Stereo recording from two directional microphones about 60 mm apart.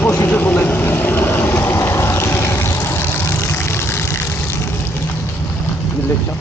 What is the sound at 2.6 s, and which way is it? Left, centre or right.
Vehicle, left.